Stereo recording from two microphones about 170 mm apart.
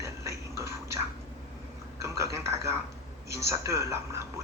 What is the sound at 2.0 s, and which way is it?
Speech, 15° right (ahead or behind).